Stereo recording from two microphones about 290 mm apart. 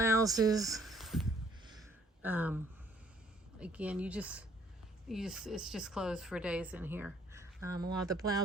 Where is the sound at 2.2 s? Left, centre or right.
Centre.